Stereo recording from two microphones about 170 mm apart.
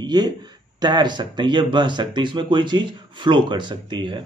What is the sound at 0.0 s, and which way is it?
A man's voice, 25° right (ahead or behind).